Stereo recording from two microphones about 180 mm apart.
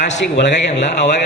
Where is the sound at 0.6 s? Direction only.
75° left (ahead or behind).